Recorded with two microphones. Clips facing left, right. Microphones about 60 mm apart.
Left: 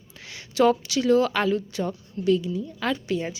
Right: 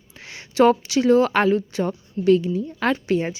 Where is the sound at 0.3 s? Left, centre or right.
Right.